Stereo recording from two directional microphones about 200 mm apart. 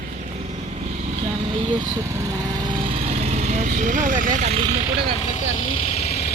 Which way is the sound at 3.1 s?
35° right (ahead or behind).